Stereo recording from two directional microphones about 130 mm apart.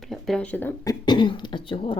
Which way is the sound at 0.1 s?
5° left (ahead or behind).